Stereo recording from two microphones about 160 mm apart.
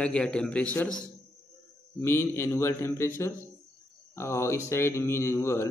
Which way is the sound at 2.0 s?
15° left (ahead or behind).